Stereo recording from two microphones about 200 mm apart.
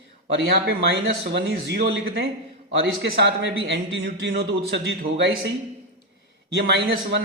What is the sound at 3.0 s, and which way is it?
Speech, 55° right (ahead or behind).